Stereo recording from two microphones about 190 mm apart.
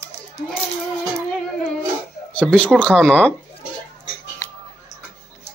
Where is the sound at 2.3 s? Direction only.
5° left (ahead or behind).